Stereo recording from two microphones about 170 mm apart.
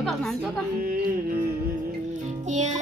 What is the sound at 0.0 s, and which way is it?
Speech, centre (ahead or behind).